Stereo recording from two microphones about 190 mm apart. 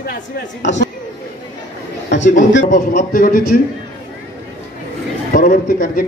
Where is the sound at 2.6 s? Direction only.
40° left (ahead or behind).